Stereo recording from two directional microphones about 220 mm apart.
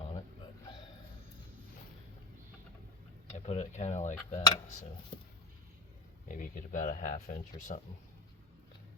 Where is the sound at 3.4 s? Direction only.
30° left (ahead or behind).